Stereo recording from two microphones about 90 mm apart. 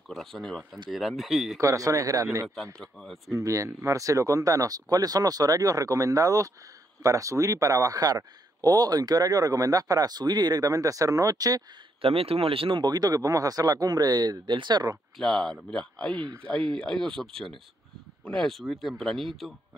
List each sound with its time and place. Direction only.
0.1 s a man's voice: 5° left (ahead or behind)
1.6 s speech: 40° right (ahead or behind)
2.4 s a man's voice: 5° left (ahead or behind)
3.3 s speech: 35° right (ahead or behind)
12.0 s speech: 90° right
12.8 s speech: 45° right (ahead or behind)
15.1 s a man's voice: 5° left (ahead or behind)